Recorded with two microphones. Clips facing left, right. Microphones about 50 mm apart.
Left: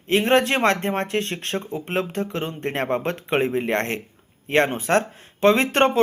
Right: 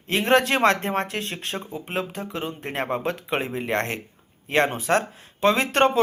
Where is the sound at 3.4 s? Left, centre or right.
Left.